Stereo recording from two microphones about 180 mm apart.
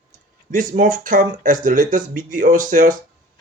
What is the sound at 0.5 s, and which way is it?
Speech, 50° right (ahead or behind).